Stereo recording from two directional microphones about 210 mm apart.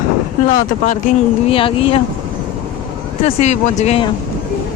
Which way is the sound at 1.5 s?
25° left (ahead or behind).